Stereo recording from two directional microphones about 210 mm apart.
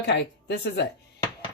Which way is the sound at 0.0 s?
55° left (ahead or behind).